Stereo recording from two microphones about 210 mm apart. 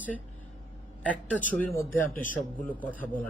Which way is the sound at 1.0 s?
5° left (ahead or behind).